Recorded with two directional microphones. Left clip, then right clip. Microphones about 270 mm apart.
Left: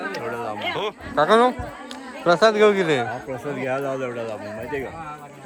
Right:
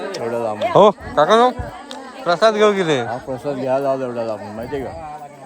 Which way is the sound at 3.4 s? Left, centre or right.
Right.